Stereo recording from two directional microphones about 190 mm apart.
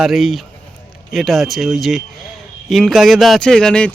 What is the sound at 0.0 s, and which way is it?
A man's voice, centre (ahead or behind).